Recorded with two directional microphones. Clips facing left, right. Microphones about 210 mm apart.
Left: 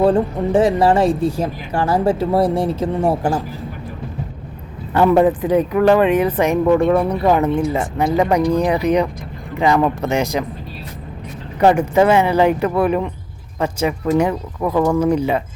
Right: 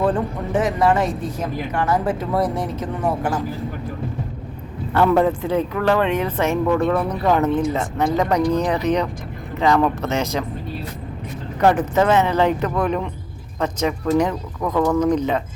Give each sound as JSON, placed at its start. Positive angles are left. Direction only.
{"t": 0.0, "sound": "speech", "side_deg": 30}
{"t": 4.9, "sound": "speech", "side_deg": 10}
{"t": 11.6, "sound": "speech", "side_deg": 10}